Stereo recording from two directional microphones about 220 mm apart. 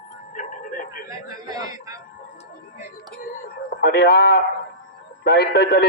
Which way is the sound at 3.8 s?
45° left (ahead or behind).